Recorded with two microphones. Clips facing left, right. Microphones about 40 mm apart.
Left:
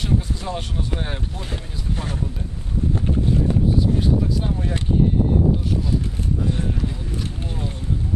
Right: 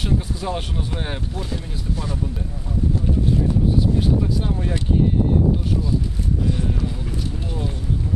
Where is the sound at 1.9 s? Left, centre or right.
Left.